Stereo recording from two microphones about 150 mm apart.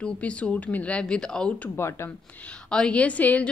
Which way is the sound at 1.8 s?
15° left (ahead or behind).